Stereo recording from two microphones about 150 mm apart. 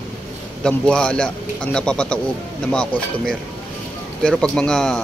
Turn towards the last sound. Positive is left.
turn(degrees=5)  # may be behind; listen again after turning